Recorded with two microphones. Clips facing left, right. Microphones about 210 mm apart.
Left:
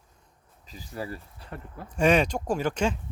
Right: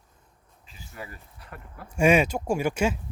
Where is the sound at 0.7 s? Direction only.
35° left (ahead or behind).